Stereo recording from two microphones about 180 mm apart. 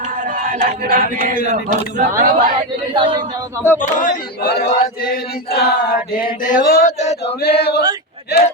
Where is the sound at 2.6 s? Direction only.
25° right (ahead or behind).